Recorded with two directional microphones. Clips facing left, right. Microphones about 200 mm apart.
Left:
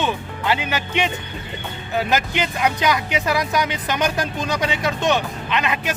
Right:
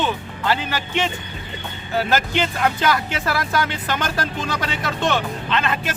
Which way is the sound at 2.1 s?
15° left (ahead or behind).